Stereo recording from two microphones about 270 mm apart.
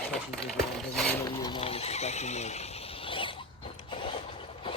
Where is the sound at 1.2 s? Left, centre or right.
Centre.